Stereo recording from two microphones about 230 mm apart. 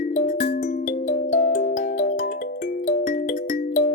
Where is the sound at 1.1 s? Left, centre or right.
Left.